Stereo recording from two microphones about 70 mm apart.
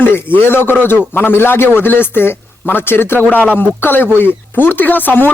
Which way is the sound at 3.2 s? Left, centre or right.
Centre.